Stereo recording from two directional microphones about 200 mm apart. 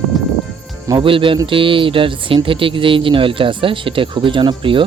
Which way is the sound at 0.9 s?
25° right (ahead or behind).